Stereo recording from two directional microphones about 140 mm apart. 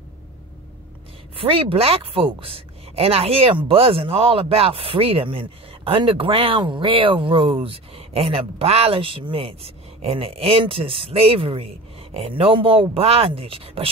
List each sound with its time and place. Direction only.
1.4 s a woman's voice: 40° right (ahead or behind)